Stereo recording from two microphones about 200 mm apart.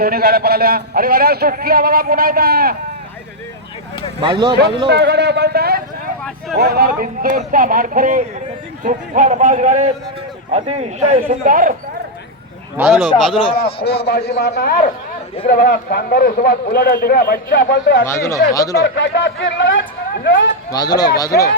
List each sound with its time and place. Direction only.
0.0 s a man's voice: 50° right (ahead or behind)
4.2 s speech: 25° right (ahead or behind)
4.9 s a man's voice: 55° right (ahead or behind); by 11.2 s 35° right (ahead or behind)
11.3 s a man's voice: 45° right (ahead or behind)
12.7 s speech: 5° right (ahead or behind)
13.6 s a man's voice: 50° left (ahead or behind)
18.0 s speech: 15° left (ahead or behind)
18.8 s a man's voice: 65° left (ahead or behind)
20.7 s speech: 20° left (ahead or behind)